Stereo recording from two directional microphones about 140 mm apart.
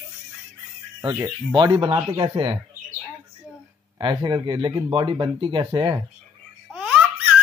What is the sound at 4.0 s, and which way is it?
Speech, 35° right (ahead or behind).